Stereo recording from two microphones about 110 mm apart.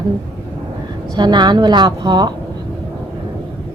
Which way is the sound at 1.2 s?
40° right (ahead or behind).